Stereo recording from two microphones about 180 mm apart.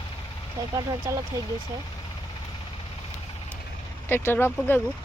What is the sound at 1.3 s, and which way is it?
Speech, 15° right (ahead or behind).